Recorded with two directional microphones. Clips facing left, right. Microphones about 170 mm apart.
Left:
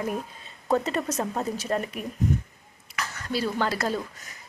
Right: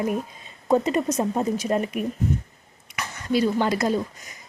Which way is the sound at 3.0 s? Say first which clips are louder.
Right 6 dB; 15° right (ahead or behind).